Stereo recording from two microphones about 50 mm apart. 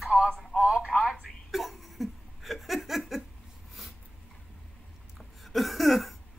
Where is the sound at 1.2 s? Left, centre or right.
Centre.